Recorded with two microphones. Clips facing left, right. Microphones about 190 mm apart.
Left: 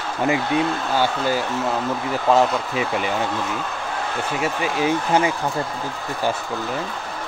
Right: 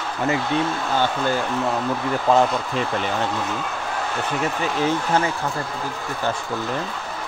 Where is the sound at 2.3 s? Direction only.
5° left (ahead or behind).